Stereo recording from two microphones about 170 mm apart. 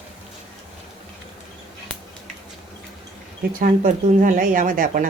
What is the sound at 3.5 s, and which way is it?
Speech, 55° right (ahead or behind).